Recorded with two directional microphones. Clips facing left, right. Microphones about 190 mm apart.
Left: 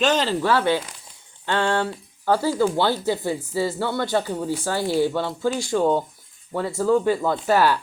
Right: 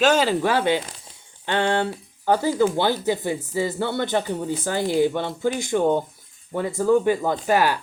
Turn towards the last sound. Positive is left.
turn(degrees=-15)  # may be behind; listen again after turning